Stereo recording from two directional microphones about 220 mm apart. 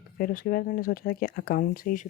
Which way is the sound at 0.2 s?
40° left (ahead or behind).